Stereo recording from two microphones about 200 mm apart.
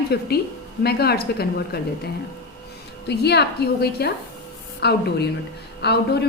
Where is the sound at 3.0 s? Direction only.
55° left (ahead or behind).